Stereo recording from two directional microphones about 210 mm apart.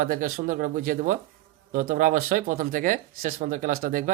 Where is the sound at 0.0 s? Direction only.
40° right (ahead or behind).